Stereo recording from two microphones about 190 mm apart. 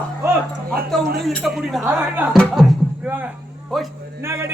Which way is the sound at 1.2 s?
Centre (ahead or behind).